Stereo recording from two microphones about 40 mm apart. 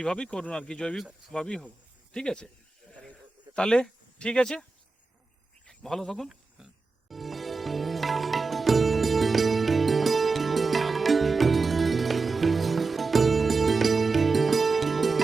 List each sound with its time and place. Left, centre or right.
0.2 s speech: left
3.5 s speech: left
5.6 s speech: centre
7.1 s sitar: centre